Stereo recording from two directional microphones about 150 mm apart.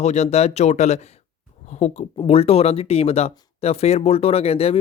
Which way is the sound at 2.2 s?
40° left (ahead or behind).